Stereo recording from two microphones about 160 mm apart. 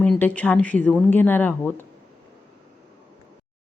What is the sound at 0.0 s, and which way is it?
Speech, 10° left (ahead or behind).